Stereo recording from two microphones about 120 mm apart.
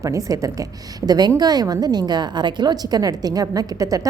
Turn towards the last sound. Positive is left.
turn(degrees=-30)  # may be behind; listen again after turning